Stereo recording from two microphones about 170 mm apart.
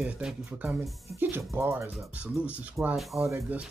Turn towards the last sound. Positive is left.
turn(degrees=-15)  # may be behind; listen again after turning